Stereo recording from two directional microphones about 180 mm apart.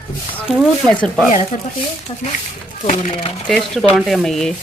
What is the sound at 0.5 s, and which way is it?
Speech, 5° left (ahead or behind).